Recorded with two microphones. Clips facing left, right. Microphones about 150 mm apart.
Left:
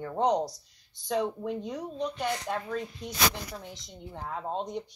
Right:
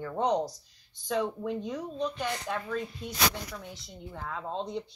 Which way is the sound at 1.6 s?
15° left (ahead or behind).